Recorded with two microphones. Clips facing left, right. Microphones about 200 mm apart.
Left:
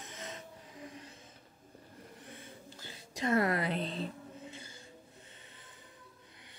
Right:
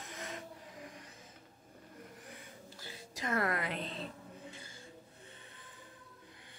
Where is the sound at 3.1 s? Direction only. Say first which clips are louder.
Left 5 dB; 25° left (ahead or behind).